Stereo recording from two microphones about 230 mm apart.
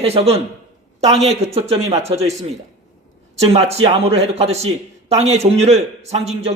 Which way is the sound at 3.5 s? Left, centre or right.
Right.